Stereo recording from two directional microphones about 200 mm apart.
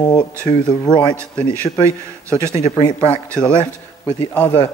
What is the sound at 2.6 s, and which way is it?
Speech, 15° left (ahead or behind).